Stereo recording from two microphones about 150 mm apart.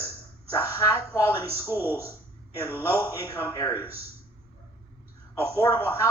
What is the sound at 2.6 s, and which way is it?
Speech, 15° left (ahead or behind).